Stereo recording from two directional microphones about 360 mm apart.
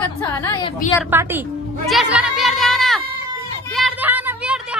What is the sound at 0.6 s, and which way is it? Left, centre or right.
Speech, centre.